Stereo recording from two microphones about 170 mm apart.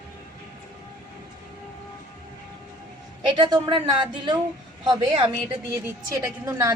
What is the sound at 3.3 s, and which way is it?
A woman's voice, 25° right (ahead or behind).